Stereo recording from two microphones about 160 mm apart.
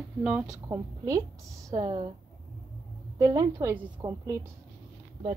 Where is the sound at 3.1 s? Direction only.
20° right (ahead or behind).